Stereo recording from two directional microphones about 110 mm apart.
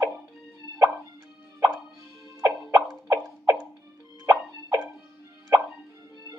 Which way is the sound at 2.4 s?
30° right (ahead or behind).